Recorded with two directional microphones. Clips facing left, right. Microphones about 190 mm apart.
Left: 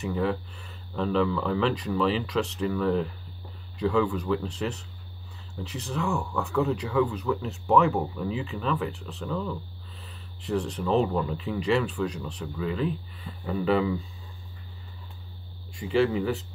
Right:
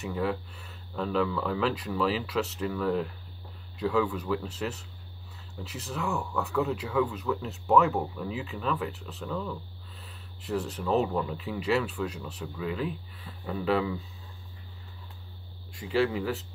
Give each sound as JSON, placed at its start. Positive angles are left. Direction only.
{"t": 0.0, "sound": "speech", "side_deg": 0}
{"t": 15.7, "sound": "speech", "side_deg": 0}